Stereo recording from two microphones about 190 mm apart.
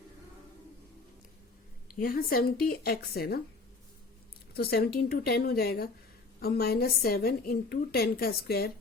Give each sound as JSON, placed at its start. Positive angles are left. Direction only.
{"t": 2.0, "sound": "a woman's voice", "side_deg": 50}
{"t": 4.5, "sound": "a woman's voice", "side_deg": 55}